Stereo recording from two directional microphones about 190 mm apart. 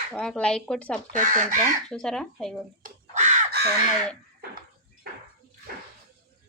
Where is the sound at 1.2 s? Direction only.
45° right (ahead or behind).